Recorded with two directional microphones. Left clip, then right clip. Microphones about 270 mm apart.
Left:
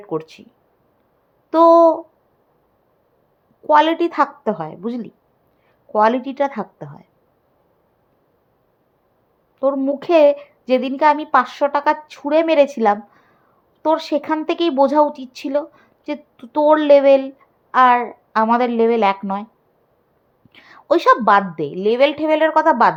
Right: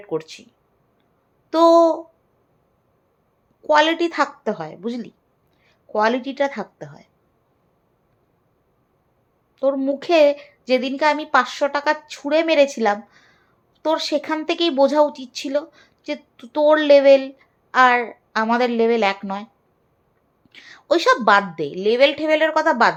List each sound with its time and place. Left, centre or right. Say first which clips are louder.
0.1 s a woman's voice: left 1 dB; left
1.5 s a woman's voice: left 3 dB; left
3.7 s a woman's voice: left 2 dB; left
9.6 s a woman's voice: left 2 dB; left
20.5 s a woman's voice: left 2 dB; left